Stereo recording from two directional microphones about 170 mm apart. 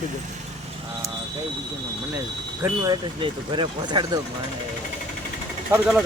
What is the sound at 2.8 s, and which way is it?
Speech, 30° right (ahead or behind).